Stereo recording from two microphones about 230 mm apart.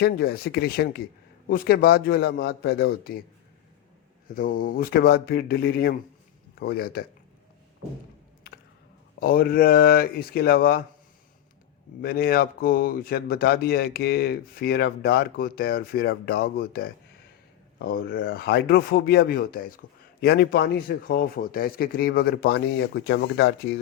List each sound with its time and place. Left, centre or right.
0.0 s a man's voice: left
4.4 s speech: left
9.2 s speech: left
12.0 s speech: left